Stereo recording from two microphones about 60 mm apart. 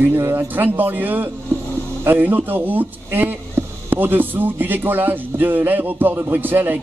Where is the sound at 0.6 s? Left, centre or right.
Right.